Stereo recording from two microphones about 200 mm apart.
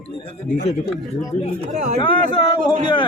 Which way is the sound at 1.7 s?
35° right (ahead or behind).